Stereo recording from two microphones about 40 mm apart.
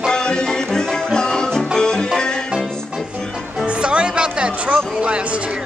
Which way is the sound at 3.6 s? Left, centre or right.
Right.